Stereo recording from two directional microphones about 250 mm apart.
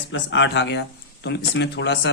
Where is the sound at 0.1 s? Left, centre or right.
Left.